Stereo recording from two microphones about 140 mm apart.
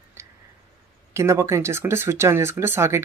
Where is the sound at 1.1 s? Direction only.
20° right (ahead or behind).